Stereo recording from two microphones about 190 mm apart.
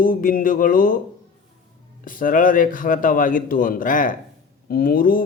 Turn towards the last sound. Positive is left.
turn(degrees=50)  # may be behind; listen again after turning